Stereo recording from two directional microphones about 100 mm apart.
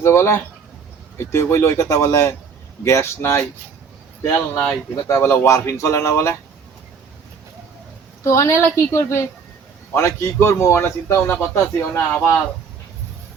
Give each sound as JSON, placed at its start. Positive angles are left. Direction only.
{"t": 0.0, "sound": "a man's voice", "side_deg": 25}
{"t": 8.2, "sound": "a man's voice", "side_deg": 30}